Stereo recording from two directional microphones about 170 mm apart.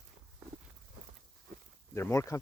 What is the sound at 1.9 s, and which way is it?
Speech, 15° left (ahead or behind).